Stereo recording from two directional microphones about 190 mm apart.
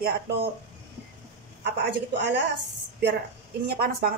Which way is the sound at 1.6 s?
65° right (ahead or behind).